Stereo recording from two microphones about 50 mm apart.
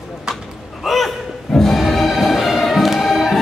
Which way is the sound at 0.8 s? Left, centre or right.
Centre.